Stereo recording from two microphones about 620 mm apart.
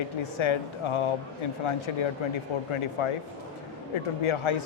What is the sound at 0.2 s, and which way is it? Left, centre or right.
Speech, left.